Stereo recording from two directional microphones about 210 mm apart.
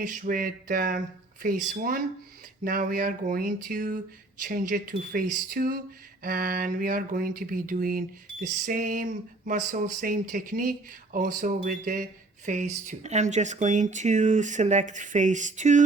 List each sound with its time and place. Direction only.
0.0 s speech: 40° right (ahead or behind)